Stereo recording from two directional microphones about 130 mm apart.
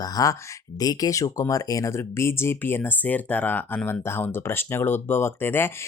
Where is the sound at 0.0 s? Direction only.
30° left (ahead or behind).